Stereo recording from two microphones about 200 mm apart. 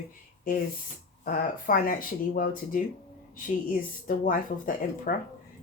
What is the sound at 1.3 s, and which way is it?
Speech, 45° left (ahead or behind).